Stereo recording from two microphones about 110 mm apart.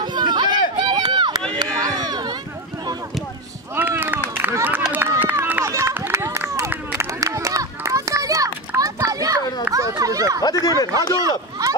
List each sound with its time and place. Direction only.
0.0 s run: 45° right (ahead or behind)
3.7 s a sound: 20° right (ahead or behind)
4.4 s run: 20° right (ahead or behind)
10.8 s speech: 35° left (ahead or behind)
11.1 s speech: 30° right (ahead or behind)